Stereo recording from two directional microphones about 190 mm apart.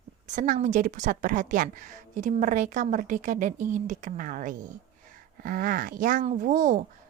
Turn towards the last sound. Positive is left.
turn(degrees=-40)  # may be behind; listen again after turning